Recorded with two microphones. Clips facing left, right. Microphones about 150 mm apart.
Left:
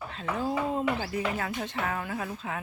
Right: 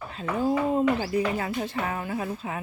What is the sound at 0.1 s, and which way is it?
Speech, 5° right (ahead or behind).